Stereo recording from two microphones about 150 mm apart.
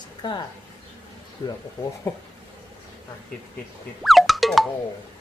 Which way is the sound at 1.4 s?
40° left (ahead or behind).